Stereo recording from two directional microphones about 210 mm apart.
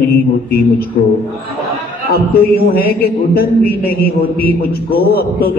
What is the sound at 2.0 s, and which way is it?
A man's voice, 50° left (ahead or behind).